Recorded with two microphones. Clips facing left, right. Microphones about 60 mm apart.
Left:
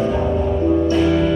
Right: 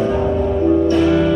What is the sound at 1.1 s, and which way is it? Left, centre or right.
Music, right.